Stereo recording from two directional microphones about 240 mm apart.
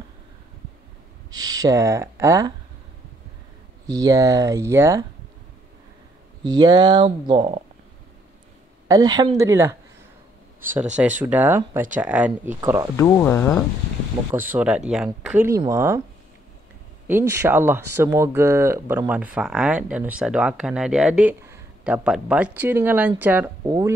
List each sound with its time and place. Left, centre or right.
1.3 s speech: centre
3.8 s speech: centre
6.4 s speech: centre
8.8 s speech: centre
11.2 s speech: centre
12.9 s speech: centre
14.3 s speech: centre
17.1 s speech: centre